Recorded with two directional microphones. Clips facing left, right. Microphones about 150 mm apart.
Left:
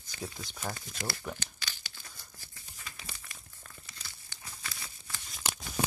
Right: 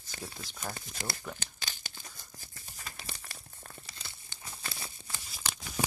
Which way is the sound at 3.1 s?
35° right (ahead or behind).